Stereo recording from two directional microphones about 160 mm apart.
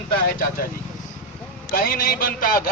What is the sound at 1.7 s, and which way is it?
Speech, 60° left (ahead or behind).